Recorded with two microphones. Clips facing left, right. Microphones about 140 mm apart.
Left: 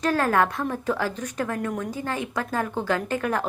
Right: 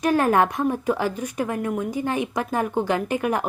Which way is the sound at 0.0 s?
15° right (ahead or behind).